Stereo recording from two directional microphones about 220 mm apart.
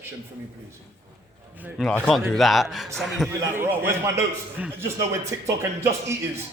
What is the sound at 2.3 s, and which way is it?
A man's voice, centre (ahead or behind).